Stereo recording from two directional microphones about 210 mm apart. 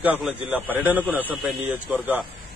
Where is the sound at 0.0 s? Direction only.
5° right (ahead or behind).